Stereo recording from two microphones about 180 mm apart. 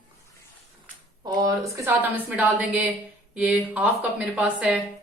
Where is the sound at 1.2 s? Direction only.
20° right (ahead or behind).